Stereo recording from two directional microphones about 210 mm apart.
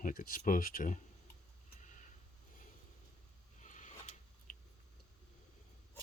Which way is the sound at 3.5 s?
35° left (ahead or behind).